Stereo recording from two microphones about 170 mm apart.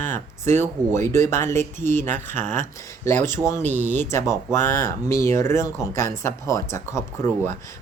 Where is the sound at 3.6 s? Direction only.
45° right (ahead or behind).